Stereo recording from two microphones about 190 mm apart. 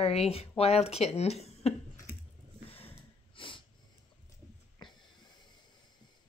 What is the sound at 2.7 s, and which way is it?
Sniff, 30° left (ahead or behind).